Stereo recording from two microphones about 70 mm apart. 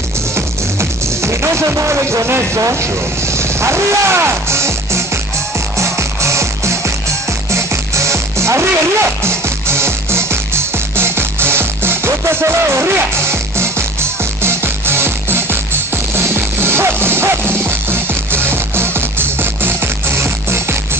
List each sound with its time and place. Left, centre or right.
0.7 s music: right